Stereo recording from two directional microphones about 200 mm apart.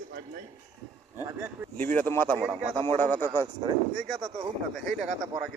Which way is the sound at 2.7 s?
25° right (ahead or behind).